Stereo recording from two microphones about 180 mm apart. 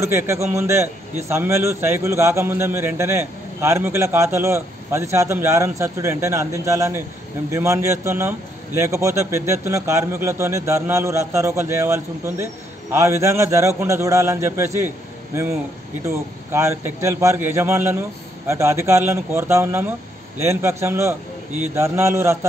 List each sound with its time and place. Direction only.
0.0 s a man's voice: 15° right (ahead or behind)
16.1 s a man's voice: 15° right (ahead or behind)